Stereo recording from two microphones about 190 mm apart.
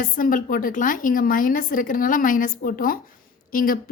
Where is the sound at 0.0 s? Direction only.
45° left (ahead or behind).